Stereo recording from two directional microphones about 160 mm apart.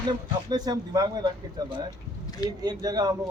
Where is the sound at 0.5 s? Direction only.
25° right (ahead or behind).